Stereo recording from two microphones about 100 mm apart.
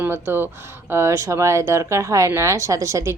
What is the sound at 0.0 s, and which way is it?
A woman's voice, 20° right (ahead or behind).